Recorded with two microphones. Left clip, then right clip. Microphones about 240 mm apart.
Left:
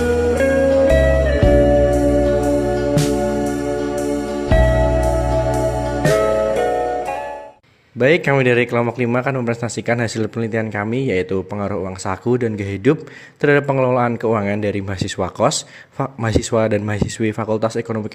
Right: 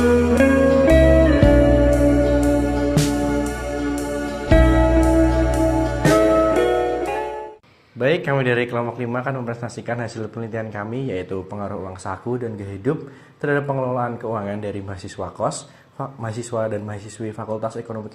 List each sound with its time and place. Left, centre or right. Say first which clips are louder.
0.0 s music: even; centre
4.3 s music: right 2 dB; centre
7.9 s a man's voice: left 5 dB; left